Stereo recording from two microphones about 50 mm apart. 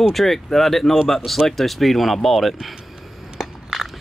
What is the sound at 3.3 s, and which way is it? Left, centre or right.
Crushing, centre.